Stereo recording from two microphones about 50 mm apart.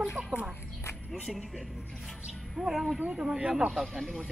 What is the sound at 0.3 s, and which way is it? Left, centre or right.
Roaring cats, right.